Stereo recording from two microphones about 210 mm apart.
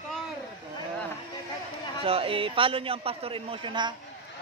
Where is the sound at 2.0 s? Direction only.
25° right (ahead or behind).